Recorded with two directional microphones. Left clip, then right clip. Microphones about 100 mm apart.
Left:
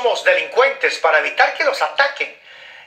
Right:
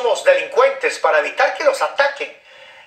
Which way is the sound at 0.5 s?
10° right (ahead or behind).